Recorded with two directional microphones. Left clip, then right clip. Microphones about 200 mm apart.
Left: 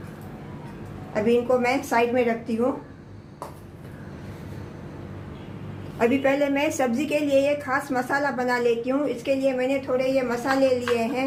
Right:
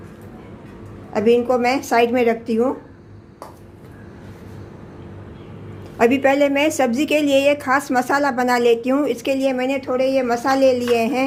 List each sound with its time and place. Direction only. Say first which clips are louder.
1.1 s a woman's voice: right 5 dB; 45° right (ahead or behind)
6.0 s a woman's voice: right 6 dB; 40° right (ahead or behind)